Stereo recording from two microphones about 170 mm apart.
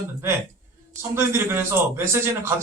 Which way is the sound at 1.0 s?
15° right (ahead or behind).